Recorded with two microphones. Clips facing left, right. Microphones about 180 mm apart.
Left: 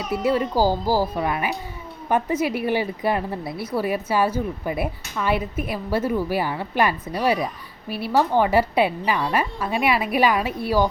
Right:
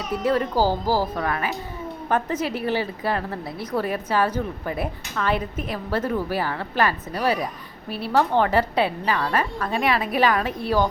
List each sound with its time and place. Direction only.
0.1 s a woman's voice: 10° left (ahead or behind)